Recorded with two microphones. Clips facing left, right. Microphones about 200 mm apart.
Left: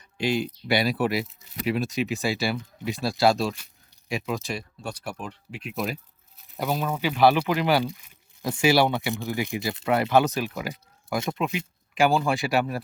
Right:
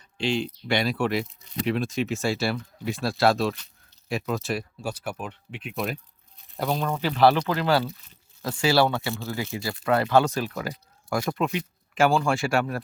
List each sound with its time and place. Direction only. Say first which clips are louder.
0.2 s speech: left 1 dB; 10° left (ahead or behind)